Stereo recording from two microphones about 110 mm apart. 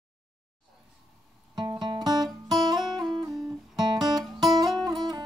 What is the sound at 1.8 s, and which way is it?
Music, 40° right (ahead or behind).